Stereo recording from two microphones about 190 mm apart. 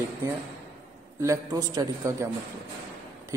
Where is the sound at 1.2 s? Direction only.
15° right (ahead or behind).